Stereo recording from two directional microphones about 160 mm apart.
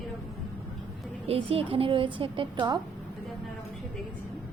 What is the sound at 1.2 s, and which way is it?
A woman's voice, 35° right (ahead or behind).